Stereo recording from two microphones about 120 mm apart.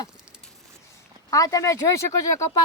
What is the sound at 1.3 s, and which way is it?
Speech, 30° left (ahead or behind).